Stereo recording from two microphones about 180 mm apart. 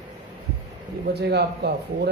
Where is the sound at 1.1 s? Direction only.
65° right (ahead or behind).